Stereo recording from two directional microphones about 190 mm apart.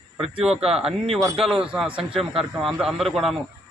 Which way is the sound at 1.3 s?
Centre (ahead or behind).